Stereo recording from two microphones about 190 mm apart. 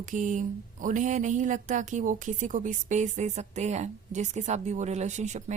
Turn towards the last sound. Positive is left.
turn(degrees=-40)  # may be behind; listen again after turning